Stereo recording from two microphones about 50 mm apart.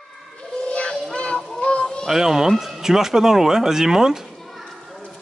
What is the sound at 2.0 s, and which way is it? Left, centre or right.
Speech, centre.